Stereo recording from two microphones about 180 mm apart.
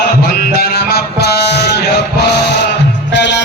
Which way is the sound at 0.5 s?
60° left (ahead or behind).